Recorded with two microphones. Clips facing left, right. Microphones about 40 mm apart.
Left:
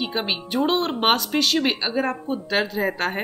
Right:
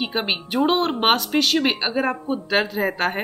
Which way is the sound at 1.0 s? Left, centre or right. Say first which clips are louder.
Even; centre.